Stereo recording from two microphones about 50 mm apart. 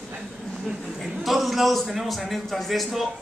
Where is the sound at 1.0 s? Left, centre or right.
Centre.